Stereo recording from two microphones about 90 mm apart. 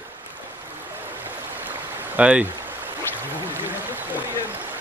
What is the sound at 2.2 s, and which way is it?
Speech, 15° right (ahead or behind).